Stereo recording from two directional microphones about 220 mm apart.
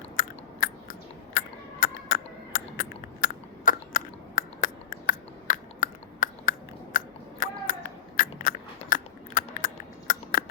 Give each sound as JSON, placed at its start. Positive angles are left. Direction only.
{"t": 0.2, "sound": "chewing", "side_deg": 40}